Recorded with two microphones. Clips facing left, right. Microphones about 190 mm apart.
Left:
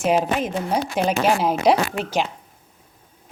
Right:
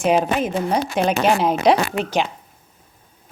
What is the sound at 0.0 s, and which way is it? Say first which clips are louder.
Speech: right 2 dB; 5° left (ahead or behind).